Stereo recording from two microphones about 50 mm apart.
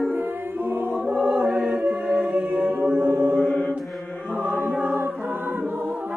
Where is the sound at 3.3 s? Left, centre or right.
Left.